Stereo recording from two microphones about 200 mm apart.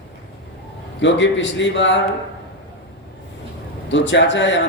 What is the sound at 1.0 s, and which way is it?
A man's voice, 65° left (ahead or behind).